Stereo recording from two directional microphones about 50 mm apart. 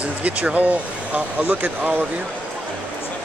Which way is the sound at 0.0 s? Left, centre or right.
Right.